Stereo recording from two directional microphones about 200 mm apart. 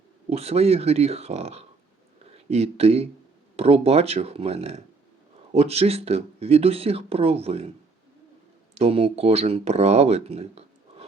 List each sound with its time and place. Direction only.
0.3 s speech: 30° right (ahead or behind)
8.7 s speech: 30° right (ahead or behind)